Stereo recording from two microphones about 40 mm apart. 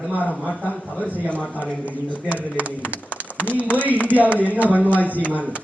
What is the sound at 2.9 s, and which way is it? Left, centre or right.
Speech, right.